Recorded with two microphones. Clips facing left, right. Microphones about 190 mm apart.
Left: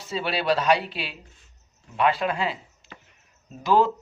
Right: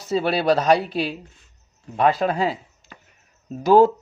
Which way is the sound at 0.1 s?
45° right (ahead or behind).